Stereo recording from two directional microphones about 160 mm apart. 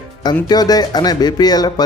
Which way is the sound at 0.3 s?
25° left (ahead or behind).